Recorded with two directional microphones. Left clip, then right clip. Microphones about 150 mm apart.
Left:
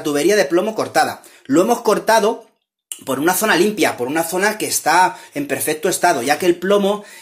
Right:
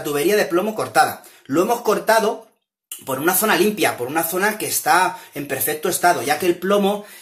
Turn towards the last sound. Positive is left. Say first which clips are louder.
# left 3 dB
turn(degrees=40)  # may be behind; listen again after turning